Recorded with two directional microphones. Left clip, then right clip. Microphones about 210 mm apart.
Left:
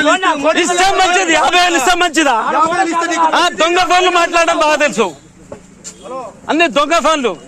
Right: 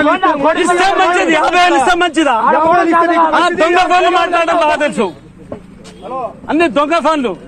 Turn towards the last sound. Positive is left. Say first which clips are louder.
# even
turn(degrees=55)  # may be behind; listen again after turning